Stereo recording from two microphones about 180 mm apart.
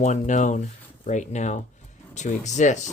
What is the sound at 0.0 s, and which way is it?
Speech, 40° left (ahead or behind).